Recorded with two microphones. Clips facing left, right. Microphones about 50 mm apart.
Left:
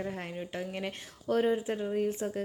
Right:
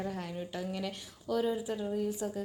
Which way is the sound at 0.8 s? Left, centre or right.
Left.